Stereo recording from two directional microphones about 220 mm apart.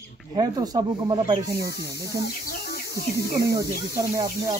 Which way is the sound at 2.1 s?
45° left (ahead or behind).